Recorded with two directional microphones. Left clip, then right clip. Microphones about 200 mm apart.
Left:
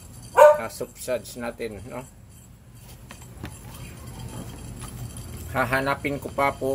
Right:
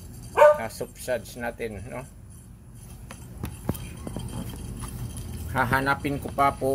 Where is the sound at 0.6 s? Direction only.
10° left (ahead or behind).